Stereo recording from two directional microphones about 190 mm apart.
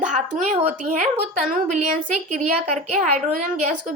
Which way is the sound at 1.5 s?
45° right (ahead or behind).